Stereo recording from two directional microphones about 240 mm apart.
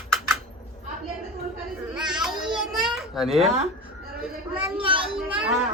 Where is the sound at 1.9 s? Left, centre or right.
Centre.